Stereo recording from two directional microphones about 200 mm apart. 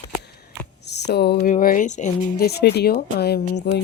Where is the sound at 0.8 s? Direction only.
55° left (ahead or behind).